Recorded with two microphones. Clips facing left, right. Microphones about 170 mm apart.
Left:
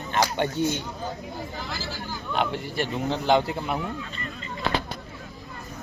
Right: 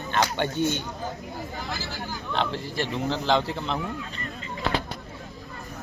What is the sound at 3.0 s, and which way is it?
Speech, 15° left (ahead or behind).